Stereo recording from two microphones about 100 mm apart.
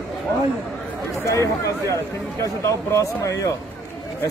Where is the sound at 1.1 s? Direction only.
30° left (ahead or behind).